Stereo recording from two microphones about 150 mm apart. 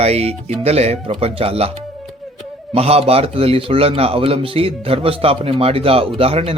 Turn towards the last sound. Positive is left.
turn(degrees=-40)  # may be behind; listen again after turning